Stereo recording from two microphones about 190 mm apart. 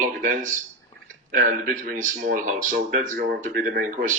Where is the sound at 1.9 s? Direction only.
45° right (ahead or behind).